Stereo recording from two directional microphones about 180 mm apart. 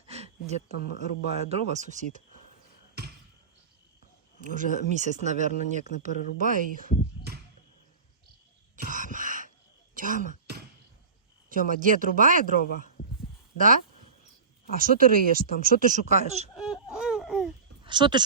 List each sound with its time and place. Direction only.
0.1 s a sound: 35° right (ahead or behind)
0.7 s speech: 60° left (ahead or behind)
1.4 s speech: 35° right (ahead or behind)
4.4 s speech: 45° right (ahead or behind)
8.7 s throat clearing: 45° right (ahead or behind)
11.7 s speech: 45° right (ahead or behind)
13.6 s speech: 50° right (ahead or behind)
16.6 s a sound: 5° right (ahead or behind)
17.8 s speech: 25° right (ahead or behind)